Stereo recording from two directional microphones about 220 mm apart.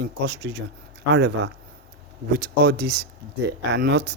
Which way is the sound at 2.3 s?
45° right (ahead or behind).